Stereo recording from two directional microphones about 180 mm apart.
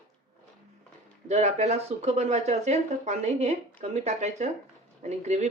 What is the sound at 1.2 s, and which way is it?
Speech, 40° right (ahead or behind).